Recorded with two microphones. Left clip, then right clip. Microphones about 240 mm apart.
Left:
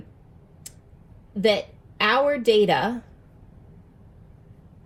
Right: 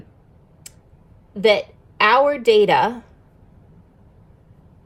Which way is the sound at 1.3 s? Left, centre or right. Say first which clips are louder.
Right 5 dB; right.